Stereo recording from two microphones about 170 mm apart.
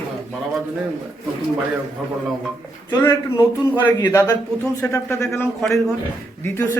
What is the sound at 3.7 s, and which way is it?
A man's voice, 10° left (ahead or behind).